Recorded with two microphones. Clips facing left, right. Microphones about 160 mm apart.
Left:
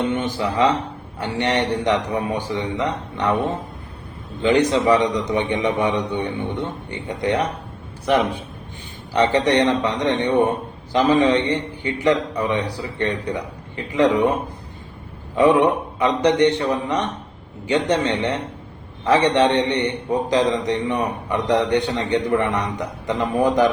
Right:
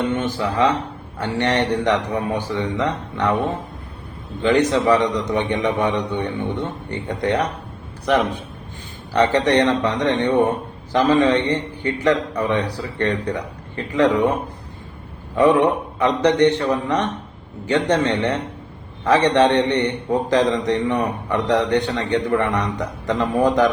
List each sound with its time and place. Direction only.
0.0 s a sound: 15° left (ahead or behind)
0.3 s a man's voice: 10° left (ahead or behind)
4.4 s a man's voice: 15° left (ahead or behind)
6.2 s speech: 15° right (ahead or behind)
7.1 s a man's voice: 15° left (ahead or behind)
15.4 s a man's voice: 15° left (ahead or behind)